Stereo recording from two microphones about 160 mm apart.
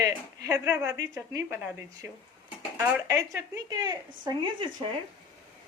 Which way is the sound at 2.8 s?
15° right (ahead or behind).